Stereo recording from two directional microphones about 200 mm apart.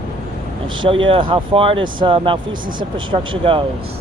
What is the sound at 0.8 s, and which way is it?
Speech, 25° right (ahead or behind).